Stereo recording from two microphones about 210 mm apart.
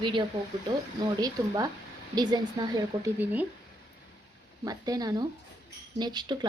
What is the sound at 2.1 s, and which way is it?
A woman's voice, 20° right (ahead or behind).